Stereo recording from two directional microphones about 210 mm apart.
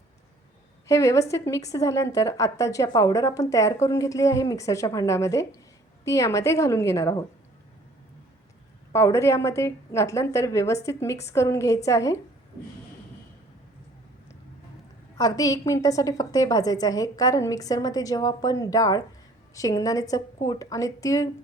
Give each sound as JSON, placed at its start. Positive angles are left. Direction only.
{"t": 0.9, "sound": "a woman's voice", "side_deg": 15}
{"t": 8.9, "sound": "a woman's voice", "side_deg": 15}
{"t": 15.2, "sound": "a woman's voice", "side_deg": 15}